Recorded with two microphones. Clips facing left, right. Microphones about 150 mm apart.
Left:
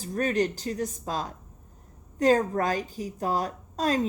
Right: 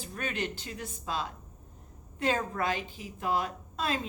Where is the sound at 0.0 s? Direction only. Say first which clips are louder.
Left 9 dB; 40° left (ahead or behind).